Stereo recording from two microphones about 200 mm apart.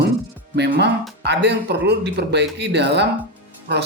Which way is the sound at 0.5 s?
60° right (ahead or behind).